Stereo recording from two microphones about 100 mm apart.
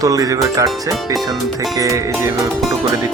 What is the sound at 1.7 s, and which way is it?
Speech, 30° right (ahead or behind).